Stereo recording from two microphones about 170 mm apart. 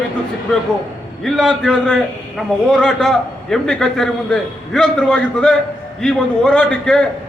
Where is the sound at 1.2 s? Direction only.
Centre (ahead or behind).